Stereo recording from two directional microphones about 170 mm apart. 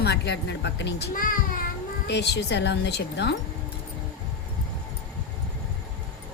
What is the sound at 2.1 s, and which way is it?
Speech, 85° left.